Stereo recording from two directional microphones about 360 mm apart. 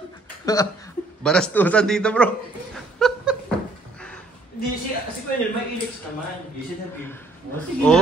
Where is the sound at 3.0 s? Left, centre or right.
Centre.